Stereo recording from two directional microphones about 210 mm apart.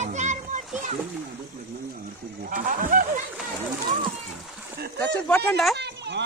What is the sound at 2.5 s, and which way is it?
Speech, 40° right (ahead or behind).